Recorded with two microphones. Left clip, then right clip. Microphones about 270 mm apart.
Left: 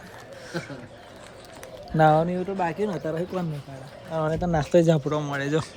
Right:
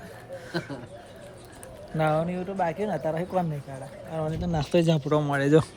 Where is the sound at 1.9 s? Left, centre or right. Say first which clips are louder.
Left 7 dB; left.